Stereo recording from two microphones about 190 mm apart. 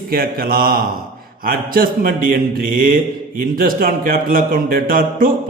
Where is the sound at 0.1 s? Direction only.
50° right (ahead or behind).